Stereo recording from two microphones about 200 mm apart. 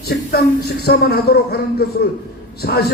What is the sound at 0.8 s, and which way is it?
A man's voice, 50° left (ahead or behind).